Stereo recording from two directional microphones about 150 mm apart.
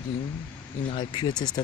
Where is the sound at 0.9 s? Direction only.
30° left (ahead or behind).